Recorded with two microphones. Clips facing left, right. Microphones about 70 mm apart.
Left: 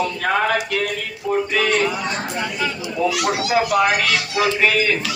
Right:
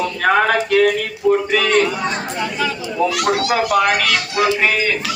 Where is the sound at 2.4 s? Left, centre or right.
Right.